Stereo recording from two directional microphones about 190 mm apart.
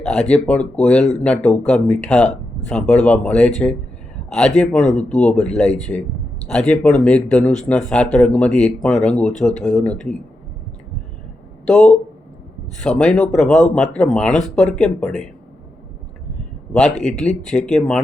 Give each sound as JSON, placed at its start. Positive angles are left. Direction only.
{"t": 0.0, "sound": "speech", "side_deg": 5}
{"t": 11.6, "sound": "speech", "side_deg": 0}
{"t": 17.1, "sound": "speech", "side_deg": 5}